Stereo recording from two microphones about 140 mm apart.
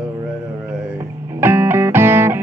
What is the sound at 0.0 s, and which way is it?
Music, 15° right (ahead or behind).